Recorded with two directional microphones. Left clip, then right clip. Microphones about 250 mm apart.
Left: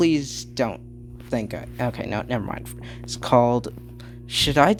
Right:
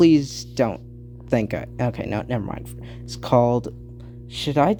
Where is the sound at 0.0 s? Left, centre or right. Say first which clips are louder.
Right 5 dB; centre.